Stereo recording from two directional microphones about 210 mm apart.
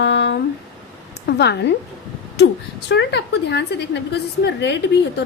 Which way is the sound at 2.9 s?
50° left (ahead or behind).